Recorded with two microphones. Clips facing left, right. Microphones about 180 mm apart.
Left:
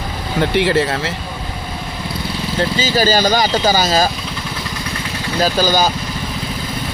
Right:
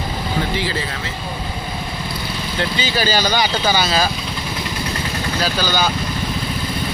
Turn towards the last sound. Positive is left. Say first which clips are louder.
# left 5 dB
turn(degrees=45)  # may be behind; listen again after turning